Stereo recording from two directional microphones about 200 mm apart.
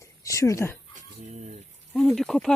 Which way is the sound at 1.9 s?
Centre (ahead or behind).